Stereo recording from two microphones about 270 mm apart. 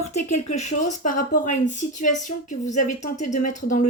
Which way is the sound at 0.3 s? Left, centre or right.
Left.